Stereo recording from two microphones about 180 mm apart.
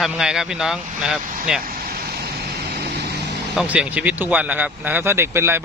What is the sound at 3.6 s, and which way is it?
Speech, 5° right (ahead or behind).